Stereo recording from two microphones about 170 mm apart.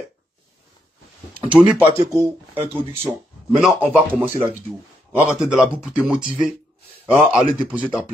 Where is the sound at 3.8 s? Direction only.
10° right (ahead or behind).